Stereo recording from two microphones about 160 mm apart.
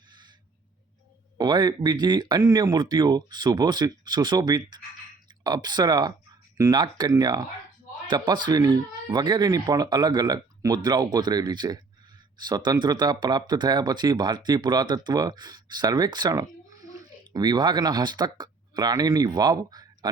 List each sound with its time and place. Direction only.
1.4 s speech: 25° right (ahead or behind)